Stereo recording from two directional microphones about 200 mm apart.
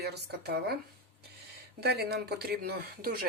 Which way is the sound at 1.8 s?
55° right (ahead or behind).